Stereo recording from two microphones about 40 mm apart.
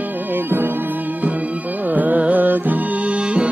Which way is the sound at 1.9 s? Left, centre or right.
Right.